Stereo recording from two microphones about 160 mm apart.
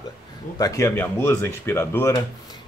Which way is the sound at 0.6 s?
20° left (ahead or behind).